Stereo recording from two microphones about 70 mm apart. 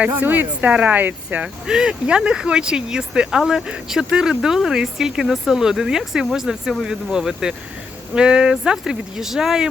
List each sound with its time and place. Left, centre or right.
0.0 s speech: right
1.6 s speech: centre